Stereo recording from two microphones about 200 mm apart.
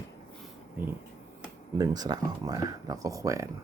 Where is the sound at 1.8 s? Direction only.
20° right (ahead or behind).